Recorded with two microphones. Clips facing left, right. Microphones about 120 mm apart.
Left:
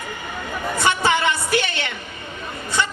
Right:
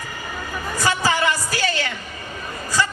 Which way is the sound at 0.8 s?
25° left (ahead or behind).